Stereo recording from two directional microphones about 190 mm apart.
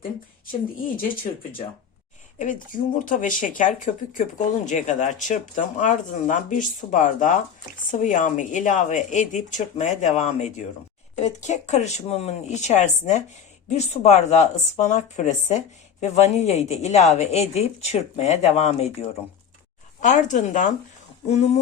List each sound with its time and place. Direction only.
0.9 s speech: 50° left (ahead or behind)
2.4 s speech: 45° left (ahead or behind)
20.0 s speech: 40° left (ahead or behind)